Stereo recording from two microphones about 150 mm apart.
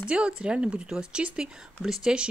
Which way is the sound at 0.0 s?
5° right (ahead or behind).